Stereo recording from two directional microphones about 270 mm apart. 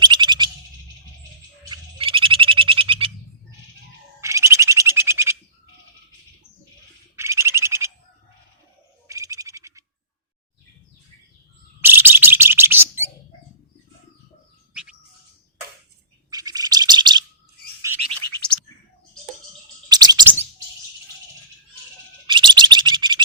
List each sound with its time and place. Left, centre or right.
0.0 s a sound: centre
1.7 s frog: centre
4.2 s a sound: centre
7.2 s owl: centre
9.0 s bird: centre
11.8 s bird: centre
14.7 s bird: centre
16.3 s bird: centre
19.9 s bird: centre
22.3 s bird: centre